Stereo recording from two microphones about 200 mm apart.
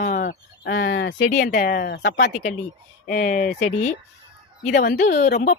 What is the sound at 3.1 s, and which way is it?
Speech, 40° left (ahead or behind).